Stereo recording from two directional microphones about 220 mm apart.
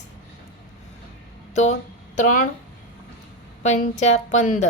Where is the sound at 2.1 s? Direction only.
35° left (ahead or behind).